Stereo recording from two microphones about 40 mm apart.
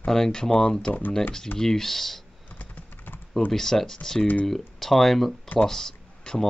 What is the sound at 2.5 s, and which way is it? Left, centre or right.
Computer keyboard, left.